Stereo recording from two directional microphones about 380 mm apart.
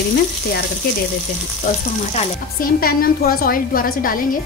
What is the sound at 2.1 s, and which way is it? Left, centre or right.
Speech, left.